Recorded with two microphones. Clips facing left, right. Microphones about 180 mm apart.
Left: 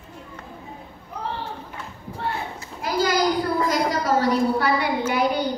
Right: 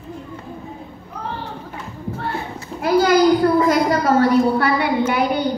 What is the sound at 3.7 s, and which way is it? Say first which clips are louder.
A woman's voice: right 6 dB; 60° right (ahead or behind).